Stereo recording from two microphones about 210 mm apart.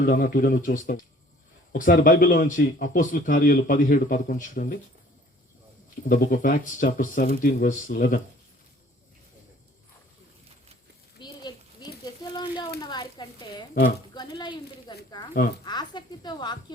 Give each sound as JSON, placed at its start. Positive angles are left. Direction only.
{"t": 0.0, "sound": "a man's voice", "side_deg": 40}
{"t": 6.1, "sound": "a man's voice", "side_deg": 40}
{"t": 11.2, "sound": "a sound", "side_deg": 20}
{"t": 15.6, "sound": "speech", "side_deg": 20}